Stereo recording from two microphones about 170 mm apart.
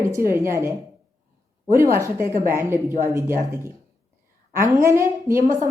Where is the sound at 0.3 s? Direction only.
15° right (ahead or behind).